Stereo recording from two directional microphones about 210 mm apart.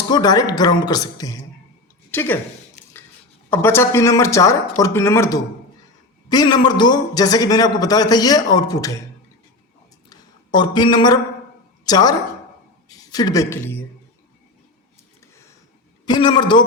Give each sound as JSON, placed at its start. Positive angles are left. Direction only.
{"t": 0.1, "sound": "a man's voice", "side_deg": 20}
{"t": 3.5, "sound": "a man's voice", "side_deg": 10}
{"t": 10.1, "sound": "a sound", "side_deg": 20}
{"t": 11.9, "sound": "a man's voice", "side_deg": 20}
{"t": 16.0, "sound": "a man's voice", "side_deg": 20}